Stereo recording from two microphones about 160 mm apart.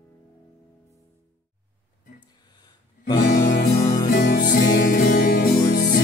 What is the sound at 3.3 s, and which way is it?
Music, 55° left (ahead or behind).